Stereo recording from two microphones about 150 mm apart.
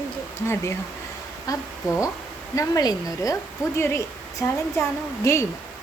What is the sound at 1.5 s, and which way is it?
A woman's voice, 20° left (ahead or behind).